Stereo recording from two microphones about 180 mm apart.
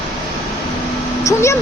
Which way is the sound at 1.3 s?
15° left (ahead or behind).